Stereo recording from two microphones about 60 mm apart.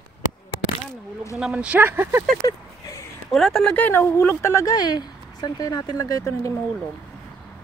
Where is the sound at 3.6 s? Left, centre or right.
Left.